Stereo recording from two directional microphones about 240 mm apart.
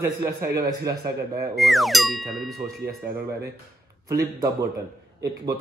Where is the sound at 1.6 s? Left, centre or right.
Centre.